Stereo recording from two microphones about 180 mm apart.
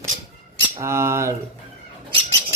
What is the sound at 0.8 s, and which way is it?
Speech, 15° right (ahead or behind).